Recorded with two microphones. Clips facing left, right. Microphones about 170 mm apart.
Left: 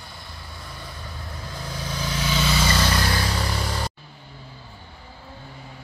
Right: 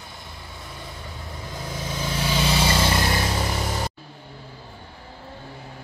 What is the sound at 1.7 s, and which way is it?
Vehicle, 25° right (ahead or behind).